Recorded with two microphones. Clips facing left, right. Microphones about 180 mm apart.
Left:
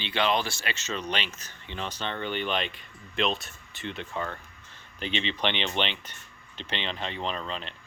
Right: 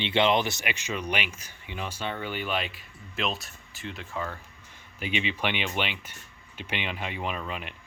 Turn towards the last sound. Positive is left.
turn(degrees=-10)  # may be behind; listen again after turning